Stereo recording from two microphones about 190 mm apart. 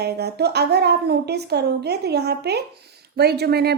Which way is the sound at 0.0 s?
60° right (ahead or behind).